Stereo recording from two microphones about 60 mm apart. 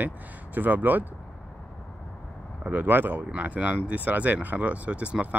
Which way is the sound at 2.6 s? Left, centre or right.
Right.